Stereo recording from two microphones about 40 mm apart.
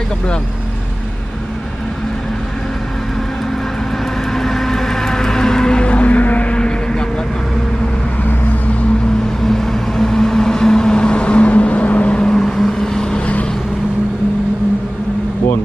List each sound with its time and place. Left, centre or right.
4.4 s music: centre
5.9 s vehicle: left
9.4 s vehicle: centre; by 12.3 s left
12.3 s vehicle: centre